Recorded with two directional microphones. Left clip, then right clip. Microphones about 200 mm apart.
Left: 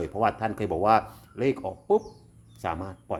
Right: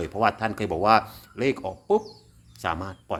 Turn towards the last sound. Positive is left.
turn(degrees=5)  # may be behind; listen again after turning